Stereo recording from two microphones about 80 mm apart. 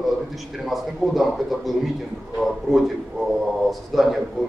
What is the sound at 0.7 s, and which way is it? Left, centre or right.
A man's voice, centre.